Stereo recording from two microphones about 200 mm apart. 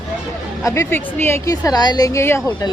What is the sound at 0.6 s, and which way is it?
Speech, 15° left (ahead or behind).